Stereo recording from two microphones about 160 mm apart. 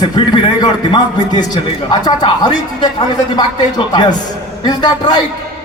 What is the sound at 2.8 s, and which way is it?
Speech, 25° left (ahead or behind).